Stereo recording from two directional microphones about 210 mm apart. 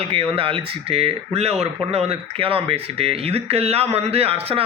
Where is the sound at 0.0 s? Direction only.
30° right (ahead or behind).